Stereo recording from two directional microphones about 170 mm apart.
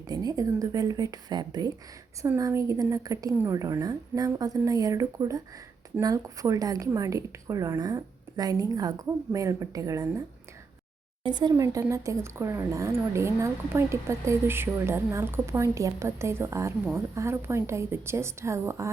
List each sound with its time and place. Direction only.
0.1 s a woman's voice: 20° right (ahead or behind)